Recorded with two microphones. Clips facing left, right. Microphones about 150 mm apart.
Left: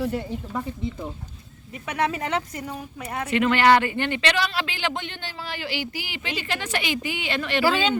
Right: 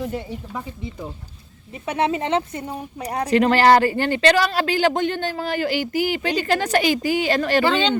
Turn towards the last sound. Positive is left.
turn(degrees=5)  # may be behind; listen again after turning